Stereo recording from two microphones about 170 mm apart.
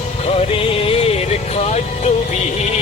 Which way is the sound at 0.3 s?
35° left (ahead or behind).